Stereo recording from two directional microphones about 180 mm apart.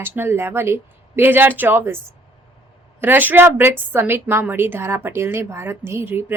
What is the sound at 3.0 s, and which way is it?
A woman's voice, 10° right (ahead or behind).